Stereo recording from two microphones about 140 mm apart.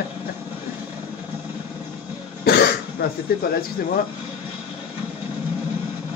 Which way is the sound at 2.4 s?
90° left.